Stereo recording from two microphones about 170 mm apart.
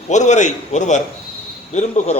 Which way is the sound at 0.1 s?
45° left (ahead or behind).